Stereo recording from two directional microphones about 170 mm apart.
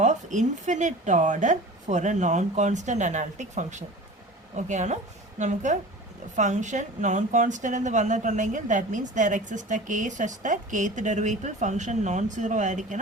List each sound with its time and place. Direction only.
0.0 s a woman's voice: 45° right (ahead or behind)